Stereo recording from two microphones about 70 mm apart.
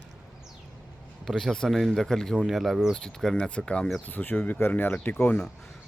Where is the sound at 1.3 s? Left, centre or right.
Centre.